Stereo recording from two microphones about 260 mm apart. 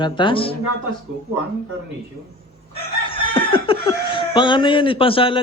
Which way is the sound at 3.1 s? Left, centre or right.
Centre.